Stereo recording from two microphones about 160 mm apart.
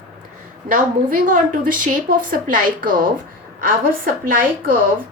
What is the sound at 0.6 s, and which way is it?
A woman's voice, 55° right (ahead or behind).